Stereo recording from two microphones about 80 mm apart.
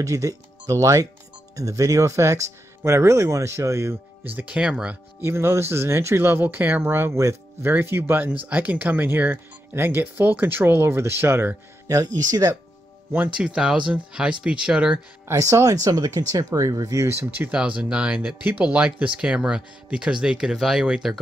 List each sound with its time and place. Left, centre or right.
0.0 s speech: right; by 4.9 s centre
5.2 s speech: right
11.9 s speech: right
13.4 s speech: centre
15.2 s speech: right; by 21.2 s centre